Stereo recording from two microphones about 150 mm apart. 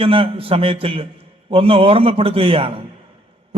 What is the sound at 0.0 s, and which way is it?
A man's voice, 40° right (ahead or behind).